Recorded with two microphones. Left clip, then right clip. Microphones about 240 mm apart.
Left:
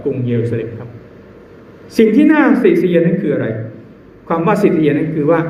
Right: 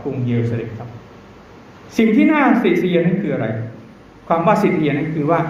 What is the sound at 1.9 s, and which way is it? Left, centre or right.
A man's voice, centre.